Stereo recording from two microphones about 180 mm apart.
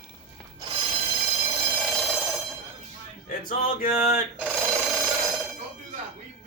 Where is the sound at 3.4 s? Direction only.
55° left (ahead or behind).